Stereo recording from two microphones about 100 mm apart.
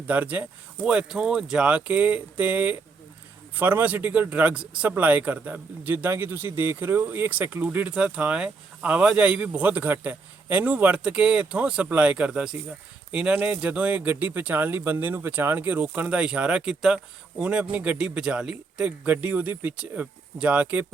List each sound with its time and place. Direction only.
0.1 s speech: 15° right (ahead or behind)